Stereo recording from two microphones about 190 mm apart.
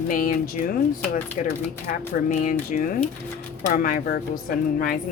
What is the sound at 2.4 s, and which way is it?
Speech, 45° left (ahead or behind).